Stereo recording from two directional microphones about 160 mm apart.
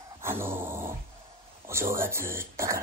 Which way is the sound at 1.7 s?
15° right (ahead or behind).